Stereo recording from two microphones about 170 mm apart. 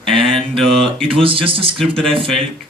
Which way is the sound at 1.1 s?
30° right (ahead or behind).